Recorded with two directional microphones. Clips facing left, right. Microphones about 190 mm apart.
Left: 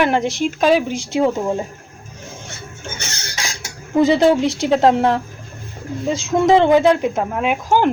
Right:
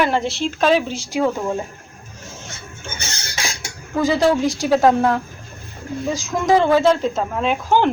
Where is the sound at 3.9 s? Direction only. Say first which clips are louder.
Left 4 dB; 20° left (ahead or behind).